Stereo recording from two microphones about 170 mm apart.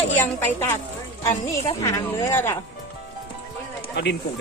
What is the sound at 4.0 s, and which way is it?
Speech, 80° left.